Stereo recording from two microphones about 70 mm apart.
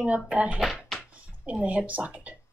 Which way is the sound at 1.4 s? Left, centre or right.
Centre.